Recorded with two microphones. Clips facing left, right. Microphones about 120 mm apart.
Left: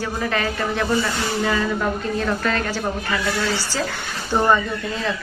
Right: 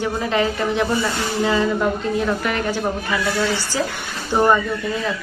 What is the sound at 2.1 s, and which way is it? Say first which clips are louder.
A woman's voice: right 1 dB; 15° right (ahead or behind).